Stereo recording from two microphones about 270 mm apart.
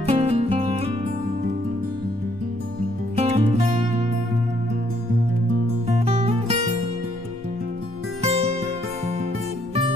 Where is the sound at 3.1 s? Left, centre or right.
Right.